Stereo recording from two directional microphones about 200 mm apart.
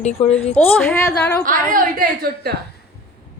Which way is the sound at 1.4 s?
40° right (ahead or behind).